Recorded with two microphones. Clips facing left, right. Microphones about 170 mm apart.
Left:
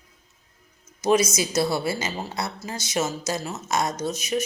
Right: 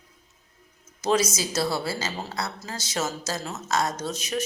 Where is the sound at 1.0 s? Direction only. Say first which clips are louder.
Left 3 dB; 10° left (ahead or behind).